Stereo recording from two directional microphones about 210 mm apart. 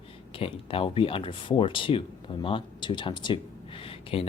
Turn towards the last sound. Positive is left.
turn(degrees=25)  # may be behind; listen again after turning